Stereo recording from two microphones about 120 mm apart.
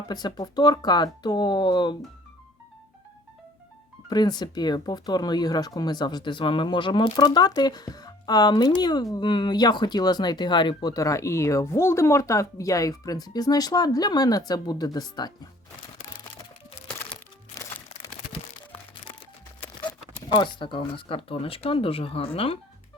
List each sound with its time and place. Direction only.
0.1 s speech: 35° left (ahead or behind)
4.1 s speech: 35° left (ahead or behind)
17.5 s music: 25° left (ahead or behind)
20.3 s speech: 40° left (ahead or behind)